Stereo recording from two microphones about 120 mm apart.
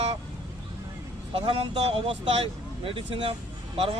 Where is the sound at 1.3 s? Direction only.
50° right (ahead or behind).